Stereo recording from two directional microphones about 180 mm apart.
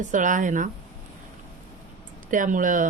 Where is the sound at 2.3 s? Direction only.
45° right (ahead or behind).